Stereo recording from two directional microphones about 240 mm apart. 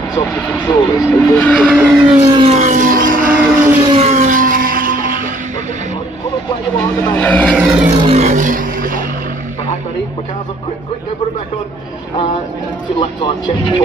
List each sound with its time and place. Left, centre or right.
0.3 s speech: centre
1.1 s vehicle: centre
1.8 s vehicle: centre
2.4 s vehicle: right
3.5 s vehicle: centre
4.0 s vehicle: right
7.0 s vehicle: centre
7.5 s vehicle: centre
8.0 s vehicle: right